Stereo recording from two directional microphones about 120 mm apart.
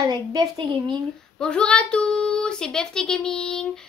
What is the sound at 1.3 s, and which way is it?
Speech, 5° left (ahead or behind).